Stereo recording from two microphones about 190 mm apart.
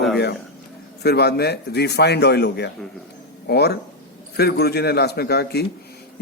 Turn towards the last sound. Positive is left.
turn(degrees=60)  # may be behind; listen again after turning